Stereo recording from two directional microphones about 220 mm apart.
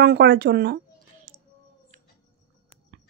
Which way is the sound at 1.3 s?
40° right (ahead or behind).